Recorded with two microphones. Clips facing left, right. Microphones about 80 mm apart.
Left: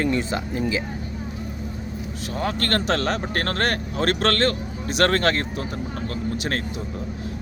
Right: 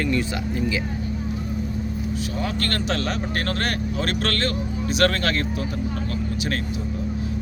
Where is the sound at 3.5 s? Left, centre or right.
Left.